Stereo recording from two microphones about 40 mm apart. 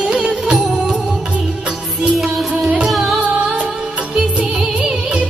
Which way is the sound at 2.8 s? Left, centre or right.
Centre.